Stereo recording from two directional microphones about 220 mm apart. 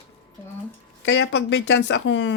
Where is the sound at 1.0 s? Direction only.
55° left (ahead or behind).